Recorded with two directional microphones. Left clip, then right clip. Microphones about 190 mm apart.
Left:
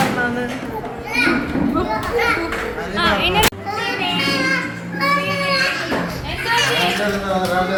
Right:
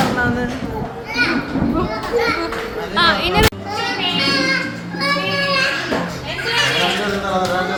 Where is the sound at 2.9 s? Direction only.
50° right (ahead or behind).